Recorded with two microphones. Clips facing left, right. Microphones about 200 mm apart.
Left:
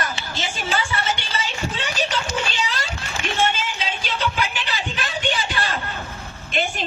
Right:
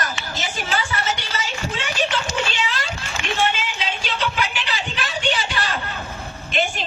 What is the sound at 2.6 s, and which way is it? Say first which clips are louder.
Children playing: right 1 dB; 40° left (ahead or behind).